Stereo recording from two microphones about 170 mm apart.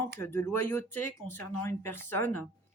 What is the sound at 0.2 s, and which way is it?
Speech, 15° left (ahead or behind).